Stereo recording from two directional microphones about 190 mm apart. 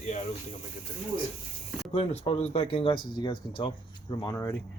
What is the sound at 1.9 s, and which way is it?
Speech, 30° left (ahead or behind).